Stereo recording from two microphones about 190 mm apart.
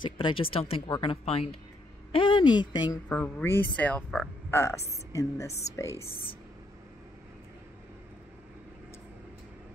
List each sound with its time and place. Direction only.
0.0 s speech: 25° left (ahead or behind)
3.1 s speech: 10° left (ahead or behind)